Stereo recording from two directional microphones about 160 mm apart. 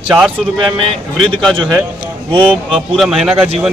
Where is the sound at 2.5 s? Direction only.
5° right (ahead or behind).